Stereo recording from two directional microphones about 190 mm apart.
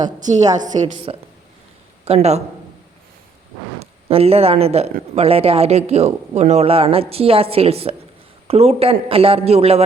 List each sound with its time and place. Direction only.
0.2 s a woman's voice: 40° right (ahead or behind)
3.8 s a man's voice: 30° right (ahead or behind)